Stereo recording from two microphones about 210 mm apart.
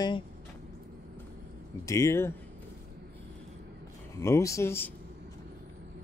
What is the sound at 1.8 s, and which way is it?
Speech, 15° left (ahead or behind).